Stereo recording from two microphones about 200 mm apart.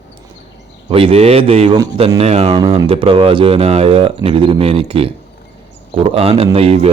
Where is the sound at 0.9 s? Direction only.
30° right (ahead or behind).